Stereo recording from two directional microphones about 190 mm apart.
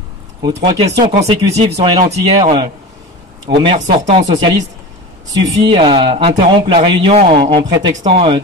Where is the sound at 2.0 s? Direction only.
35° right (ahead or behind).